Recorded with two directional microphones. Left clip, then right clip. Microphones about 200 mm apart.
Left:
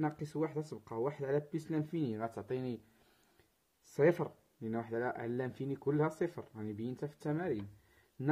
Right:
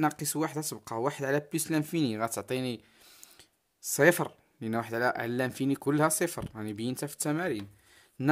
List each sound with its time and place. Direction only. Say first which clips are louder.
0.0 s speech: right 7 dB; 40° right (ahead or behind)
3.9 s speech: right 7 dB; 40° right (ahead or behind)